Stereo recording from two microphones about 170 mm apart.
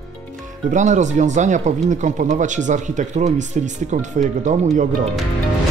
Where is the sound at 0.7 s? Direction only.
45° right (ahead or behind).